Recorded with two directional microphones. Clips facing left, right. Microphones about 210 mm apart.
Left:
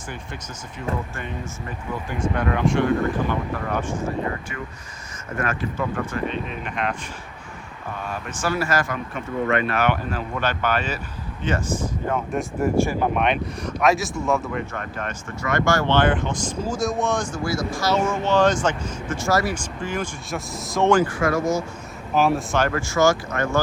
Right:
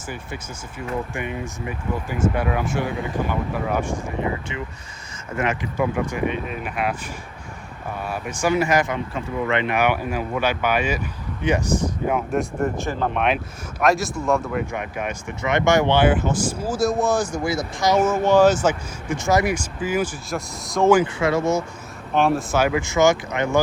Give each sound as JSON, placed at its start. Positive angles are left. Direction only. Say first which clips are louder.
{"t": 1.1, "sound": "speech", "louder": "right 4 dB", "side_deg": -15}
{"t": 7.9, "sound": "speech", "louder": "right 3 dB", "side_deg": -10}
{"t": 12.6, "sound": "speech", "louder": "left 3 dB", "side_deg": 5}
{"t": 14.7, "sound": "speech", "louder": "right 3 dB", "side_deg": -10}
{"t": 17.3, "sound": "speech", "louder": "right 1 dB", "side_deg": -20}
{"t": 19.1, "sound": "speech", "louder": "right 3 dB", "side_deg": -20}
{"t": 21.0, "sound": "speech", "louder": "right 1 dB", "side_deg": -25}
{"t": 22.1, "sound": "speech", "louder": "right 1 dB", "side_deg": 0}